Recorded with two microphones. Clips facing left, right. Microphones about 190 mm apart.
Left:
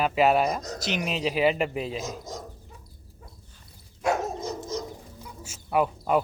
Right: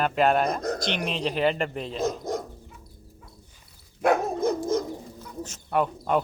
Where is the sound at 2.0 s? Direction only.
60° right (ahead or behind).